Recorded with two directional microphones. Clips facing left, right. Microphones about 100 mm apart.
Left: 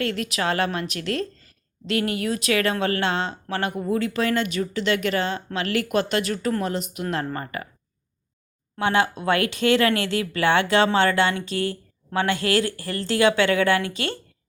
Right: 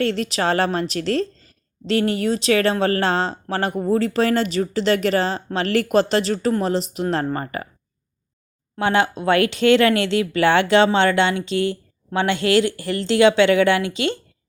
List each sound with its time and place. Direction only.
0.0 s a woman's voice: 30° right (ahead or behind)
8.8 s speech: 30° right (ahead or behind)